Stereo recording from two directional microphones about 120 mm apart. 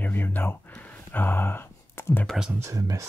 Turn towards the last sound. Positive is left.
turn(degrees=-30)  # may be behind; listen again after turning